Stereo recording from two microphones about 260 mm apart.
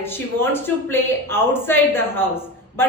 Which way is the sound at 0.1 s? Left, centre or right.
Centre.